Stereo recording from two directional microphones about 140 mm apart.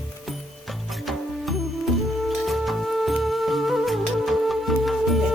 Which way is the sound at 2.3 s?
Centre (ahead or behind).